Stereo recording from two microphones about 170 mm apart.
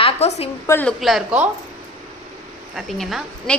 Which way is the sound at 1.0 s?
5° right (ahead or behind).